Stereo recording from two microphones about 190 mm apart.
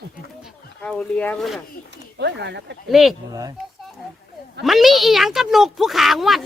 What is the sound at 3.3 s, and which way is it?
Speech, 20° right (ahead or behind).